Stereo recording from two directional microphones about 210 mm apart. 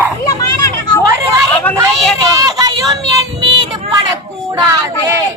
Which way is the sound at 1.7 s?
10° left (ahead or behind).